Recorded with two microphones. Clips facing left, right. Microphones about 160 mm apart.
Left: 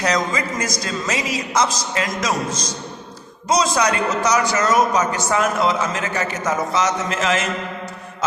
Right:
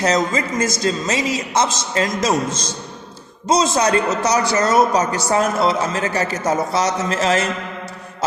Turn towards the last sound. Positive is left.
turn(degrees=-35)  # may be behind; listen again after turning